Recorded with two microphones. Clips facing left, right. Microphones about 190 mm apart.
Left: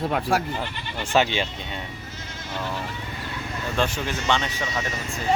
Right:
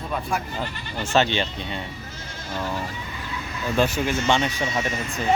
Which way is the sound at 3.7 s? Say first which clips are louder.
Right 4 dB; 10° right (ahead or behind).